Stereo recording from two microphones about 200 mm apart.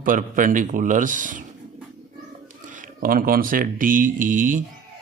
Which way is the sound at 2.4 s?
40° right (ahead or behind).